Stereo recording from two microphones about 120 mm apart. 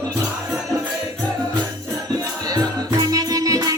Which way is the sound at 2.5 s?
30° right (ahead or behind).